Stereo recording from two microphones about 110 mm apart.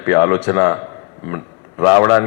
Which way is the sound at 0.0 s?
25° left (ahead or behind).